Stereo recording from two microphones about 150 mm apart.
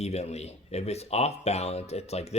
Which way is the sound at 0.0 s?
45° left (ahead or behind).